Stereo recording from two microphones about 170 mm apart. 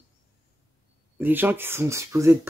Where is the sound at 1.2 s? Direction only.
10° right (ahead or behind).